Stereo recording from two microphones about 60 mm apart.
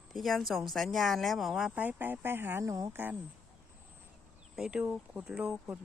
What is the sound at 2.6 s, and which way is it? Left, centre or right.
Speech, right.